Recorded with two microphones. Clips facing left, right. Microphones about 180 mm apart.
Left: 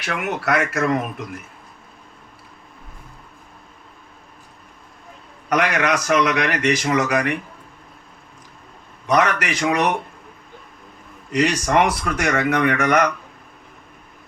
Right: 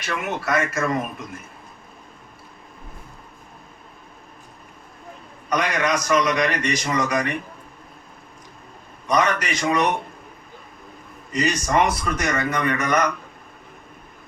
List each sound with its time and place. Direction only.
0.0 s a man's voice: 70° left (ahead or behind)
5.5 s a man's voice: 75° left (ahead or behind)
9.0 s a man's voice: 75° left (ahead or behind)
11.3 s a man's voice: 75° left (ahead or behind)